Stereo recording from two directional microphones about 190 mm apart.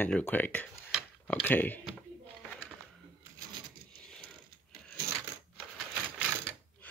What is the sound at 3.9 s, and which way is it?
Coin, 5° left (ahead or behind).